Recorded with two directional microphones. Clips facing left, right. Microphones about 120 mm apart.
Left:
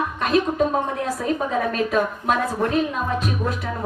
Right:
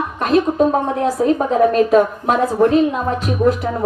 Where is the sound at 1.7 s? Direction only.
25° right (ahead or behind).